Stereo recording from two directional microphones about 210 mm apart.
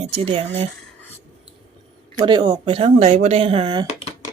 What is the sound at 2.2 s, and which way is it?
Speech, 20° right (ahead or behind).